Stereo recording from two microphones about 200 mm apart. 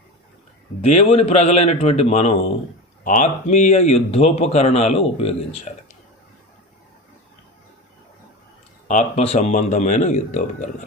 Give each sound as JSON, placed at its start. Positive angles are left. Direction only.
{"t": 0.8, "sound": "speech", "side_deg": 35}
{"t": 8.9, "sound": "speech", "side_deg": 35}